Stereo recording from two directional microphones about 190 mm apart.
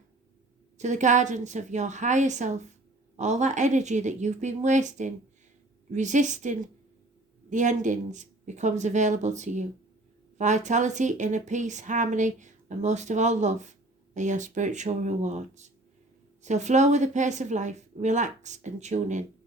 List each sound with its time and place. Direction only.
0.8 s speech: 40° right (ahead or behind)